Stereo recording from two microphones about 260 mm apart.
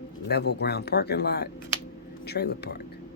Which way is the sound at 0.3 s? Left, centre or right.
Left.